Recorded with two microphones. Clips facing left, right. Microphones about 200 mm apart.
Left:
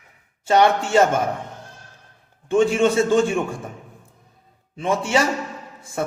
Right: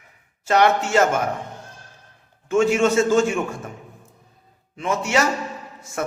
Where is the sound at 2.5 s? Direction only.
30° left (ahead or behind).